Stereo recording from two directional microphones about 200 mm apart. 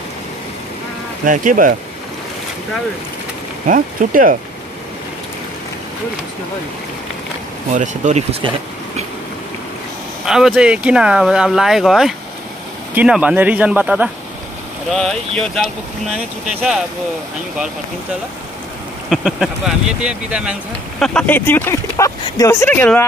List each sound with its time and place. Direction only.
1.2 s speech: 40° right (ahead or behind)
3.6 s speech: 40° right (ahead or behind)
7.7 s speech: 40° right (ahead or behind)
10.2 s speech: centre (ahead or behind)
19.0 s speech: centre (ahead or behind)
21.0 s speech: 5° left (ahead or behind)